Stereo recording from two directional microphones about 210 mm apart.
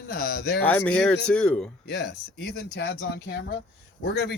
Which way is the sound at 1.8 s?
55° left (ahead or behind).